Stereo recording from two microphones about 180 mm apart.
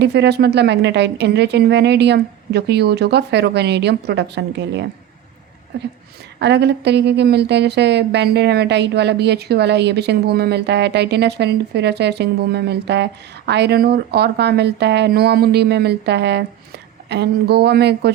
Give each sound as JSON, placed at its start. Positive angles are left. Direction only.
{"t": 0.0, "sound": "speech", "side_deg": -70}
{"t": 6.4, "sound": "speech", "side_deg": -70}